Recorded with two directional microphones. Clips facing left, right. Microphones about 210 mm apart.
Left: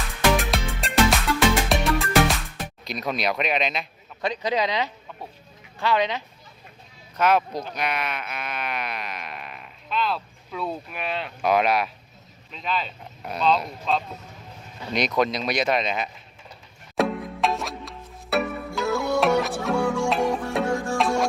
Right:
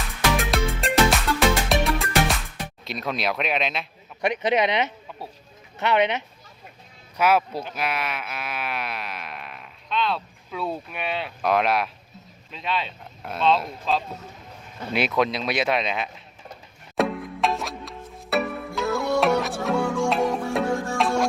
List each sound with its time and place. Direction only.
0.3 s music: centre (ahead or behind)
2.8 s speech: centre (ahead or behind)
4.2 s speech: 20° right (ahead or behind)
7.2 s speech: 5° right (ahead or behind)
17.0 s music: centre (ahead or behind)